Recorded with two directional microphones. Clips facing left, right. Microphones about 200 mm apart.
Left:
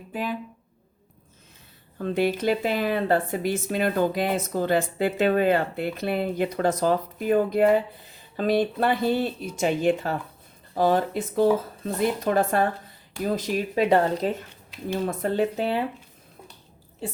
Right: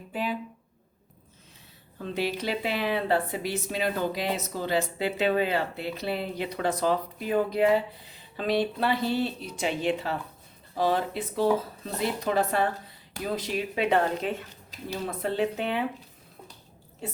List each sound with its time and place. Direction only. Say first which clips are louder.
0.1 s speech: left 1 dB; 45° left (ahead or behind)
2.0 s speech: left 6 dB; 50° left (ahead or behind); by 15.8 s 35° left (ahead or behind)